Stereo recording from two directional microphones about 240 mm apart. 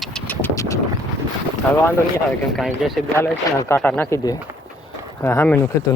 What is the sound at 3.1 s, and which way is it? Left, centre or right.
Speech, centre.